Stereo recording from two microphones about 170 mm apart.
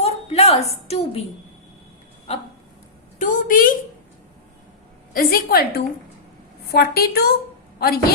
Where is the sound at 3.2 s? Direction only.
50° left (ahead or behind).